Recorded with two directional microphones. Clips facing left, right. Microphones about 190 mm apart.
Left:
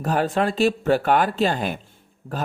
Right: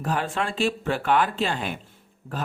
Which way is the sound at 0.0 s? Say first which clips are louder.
Left 6 dB; 40° left (ahead or behind).